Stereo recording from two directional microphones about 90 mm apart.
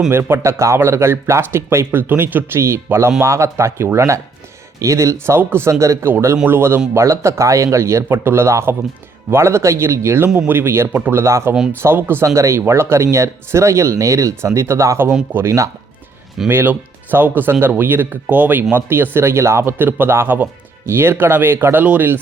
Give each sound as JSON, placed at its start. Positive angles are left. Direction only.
{"t": 0.1, "sound": "speech", "side_deg": -30}
{"t": 16.5, "sound": "speech", "side_deg": -25}